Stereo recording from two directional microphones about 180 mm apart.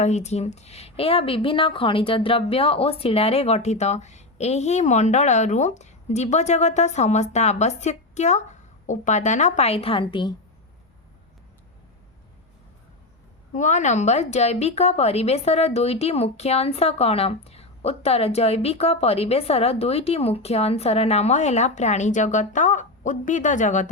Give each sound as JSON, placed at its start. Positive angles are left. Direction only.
{"t": 0.0, "sound": "a woman's voice", "side_deg": 40}
{"t": 13.5, "sound": "a woman's voice", "side_deg": 45}